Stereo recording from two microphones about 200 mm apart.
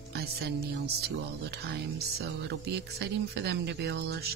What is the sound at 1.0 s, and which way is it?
Speech, 55° right (ahead or behind).